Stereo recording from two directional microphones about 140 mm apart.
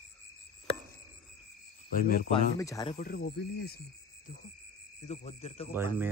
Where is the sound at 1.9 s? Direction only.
90° left.